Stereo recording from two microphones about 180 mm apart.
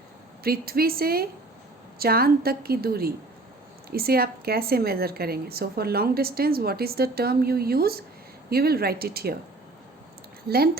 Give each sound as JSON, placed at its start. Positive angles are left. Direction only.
{"t": 0.4, "sound": "a woman's voice", "side_deg": -55}